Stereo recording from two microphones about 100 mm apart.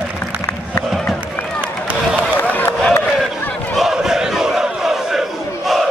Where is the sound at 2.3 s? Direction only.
20° left (ahead or behind).